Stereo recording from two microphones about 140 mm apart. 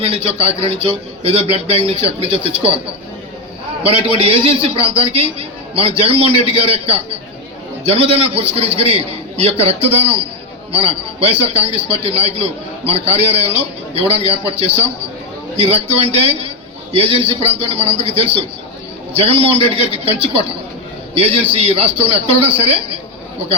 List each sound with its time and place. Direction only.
0.0 s a man's voice: 45° right (ahead or behind)
3.8 s a man's voice: 45° right (ahead or behind)